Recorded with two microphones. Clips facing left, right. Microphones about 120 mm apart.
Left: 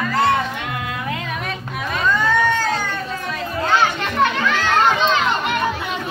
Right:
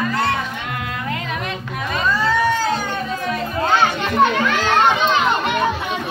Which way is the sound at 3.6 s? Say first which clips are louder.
Right 1 dB; 15° right (ahead or behind).